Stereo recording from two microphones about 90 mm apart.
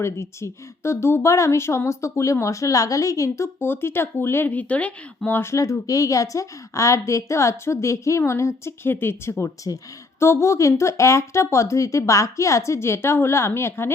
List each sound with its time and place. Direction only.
0.0 s speech: 30° left (ahead or behind); by 5.4 s 15° left (ahead or behind)
5.4 s speech: 35° left (ahead or behind)
9.7 s speech: 45° left (ahead or behind)
10.2 s speech: 30° left (ahead or behind)